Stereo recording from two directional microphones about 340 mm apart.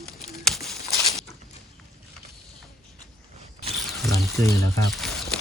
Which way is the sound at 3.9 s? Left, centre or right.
Centre.